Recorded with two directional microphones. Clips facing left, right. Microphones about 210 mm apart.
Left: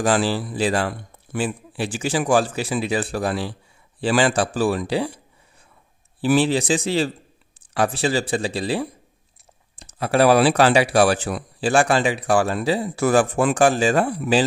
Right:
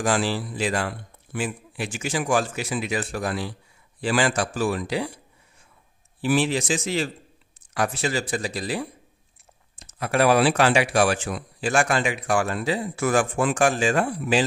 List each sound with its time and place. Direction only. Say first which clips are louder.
0.0 s speech: left 4 dB; 35° left (ahead or behind)
6.3 s speech: left 4 dB; 30° left (ahead or behind)